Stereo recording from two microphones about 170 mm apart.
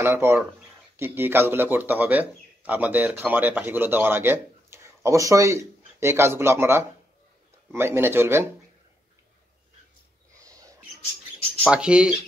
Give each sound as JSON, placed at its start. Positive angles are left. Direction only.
{"t": 0.0, "sound": "a man's voice", "side_deg": -15}
{"t": 10.3, "sound": "a sound", "side_deg": -20}
{"t": 11.7, "sound": "speech", "side_deg": -5}